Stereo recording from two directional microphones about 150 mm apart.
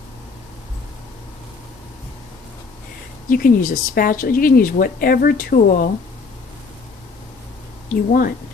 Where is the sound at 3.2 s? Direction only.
65° left (ahead or behind).